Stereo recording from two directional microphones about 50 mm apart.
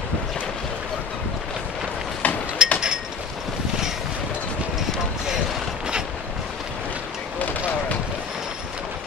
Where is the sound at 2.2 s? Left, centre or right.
Left.